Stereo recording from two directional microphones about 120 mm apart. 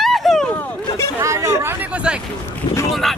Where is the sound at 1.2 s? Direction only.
25° right (ahead or behind).